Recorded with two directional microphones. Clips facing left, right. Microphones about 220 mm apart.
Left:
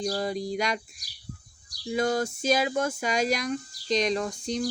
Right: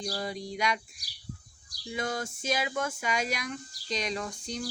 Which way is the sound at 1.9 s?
40° left (ahead or behind).